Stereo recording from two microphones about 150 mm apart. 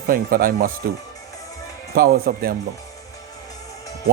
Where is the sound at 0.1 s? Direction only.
70° right (ahead or behind).